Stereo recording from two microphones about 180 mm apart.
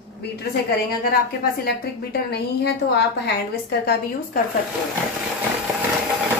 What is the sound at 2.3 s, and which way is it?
Speech, 65° left (ahead or behind).